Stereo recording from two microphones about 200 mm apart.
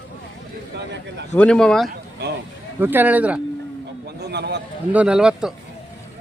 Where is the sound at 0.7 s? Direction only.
60° right (ahead or behind).